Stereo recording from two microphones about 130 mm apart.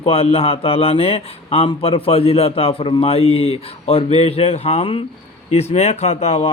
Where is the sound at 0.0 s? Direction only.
45° left (ahead or behind).